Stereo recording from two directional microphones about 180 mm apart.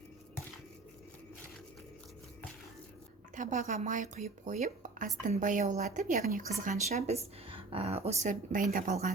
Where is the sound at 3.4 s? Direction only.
45° right (ahead or behind).